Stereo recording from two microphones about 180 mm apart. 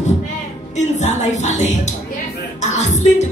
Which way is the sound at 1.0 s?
40° left (ahead or behind).